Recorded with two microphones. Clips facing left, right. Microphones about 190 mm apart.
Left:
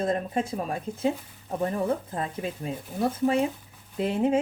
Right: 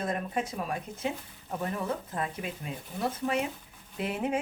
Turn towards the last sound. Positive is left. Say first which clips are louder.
# left 7 dB
turn(degrees=30)  # may be behind; listen again after turning